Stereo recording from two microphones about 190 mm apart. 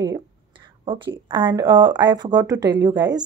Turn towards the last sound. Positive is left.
turn(degrees=-20)  # may be behind; listen again after turning